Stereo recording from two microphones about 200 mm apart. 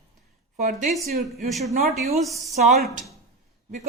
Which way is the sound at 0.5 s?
40° right (ahead or behind).